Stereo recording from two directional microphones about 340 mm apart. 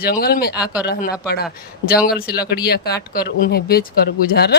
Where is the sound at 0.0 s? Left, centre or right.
Left.